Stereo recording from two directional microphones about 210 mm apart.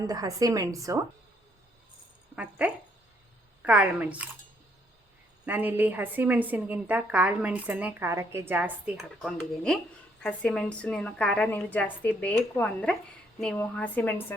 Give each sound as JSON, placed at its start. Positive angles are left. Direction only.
{"t": 0.0, "sound": "a woman's voice", "side_deg": -15}
{"t": 2.3, "sound": "a woman's voice", "side_deg": -5}
{"t": 5.5, "sound": "a woman's voice", "side_deg": -10}